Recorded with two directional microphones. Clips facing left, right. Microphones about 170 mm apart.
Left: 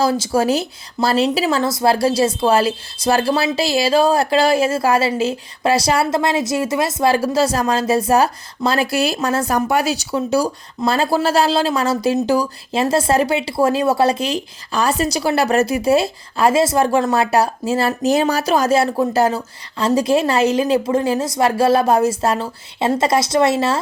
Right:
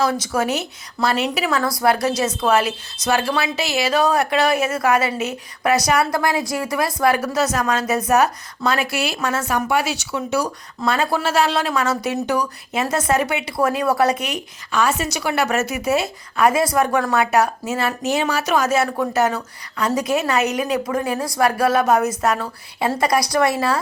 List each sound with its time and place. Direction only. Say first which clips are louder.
0.0 s a woman's voice: left 4 dB; 30° left (ahead or behind)